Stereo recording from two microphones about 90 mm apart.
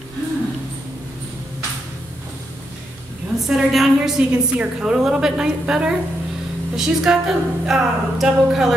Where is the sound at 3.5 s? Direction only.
Centre (ahead or behind).